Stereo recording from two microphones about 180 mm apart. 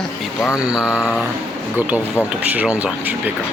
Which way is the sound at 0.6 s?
5° right (ahead or behind).